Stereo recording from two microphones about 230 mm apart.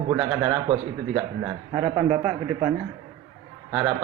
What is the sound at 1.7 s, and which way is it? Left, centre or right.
Speech, centre.